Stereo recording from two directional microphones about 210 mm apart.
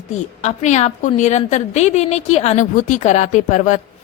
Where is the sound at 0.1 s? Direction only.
35° left (ahead or behind).